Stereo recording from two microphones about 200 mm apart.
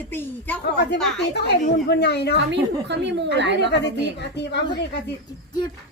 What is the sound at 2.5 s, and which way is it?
A woman's voice, 60° right (ahead or behind).